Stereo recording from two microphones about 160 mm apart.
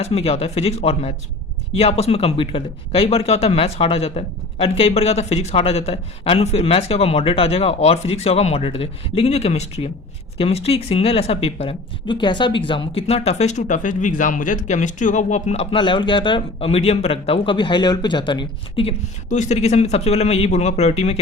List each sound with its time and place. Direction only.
0.0 s speech: 40° left (ahead or behind)
19.3 s speech: 45° left (ahead or behind)